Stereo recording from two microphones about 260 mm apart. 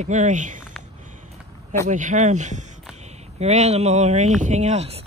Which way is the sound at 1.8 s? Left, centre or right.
Right.